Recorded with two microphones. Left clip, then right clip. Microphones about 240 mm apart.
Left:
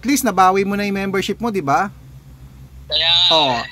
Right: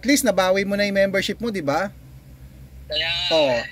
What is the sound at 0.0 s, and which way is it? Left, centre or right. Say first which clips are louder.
Speech: left 4 dB; left.